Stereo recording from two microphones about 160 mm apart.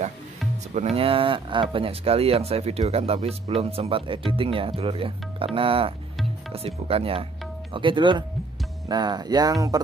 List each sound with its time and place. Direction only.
0.7 s speech: 40° right (ahead or behind); by 9.8 s 25° right (ahead or behind)